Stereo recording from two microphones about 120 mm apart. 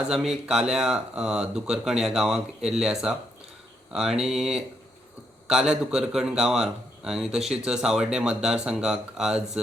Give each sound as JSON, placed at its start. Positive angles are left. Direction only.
{"t": 0.1, "sound": "a man's voice", "side_deg": -5}